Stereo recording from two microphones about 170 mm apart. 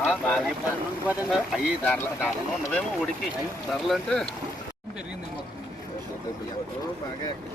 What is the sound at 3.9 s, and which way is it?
Speech, centre (ahead or behind).